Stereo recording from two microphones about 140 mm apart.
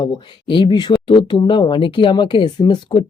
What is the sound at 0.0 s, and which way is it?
Speech, 35° left (ahead or behind).